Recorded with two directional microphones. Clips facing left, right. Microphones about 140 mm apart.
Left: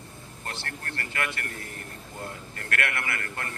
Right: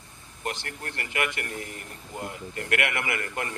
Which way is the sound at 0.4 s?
20° right (ahead or behind).